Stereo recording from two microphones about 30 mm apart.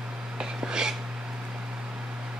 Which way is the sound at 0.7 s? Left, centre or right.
Right.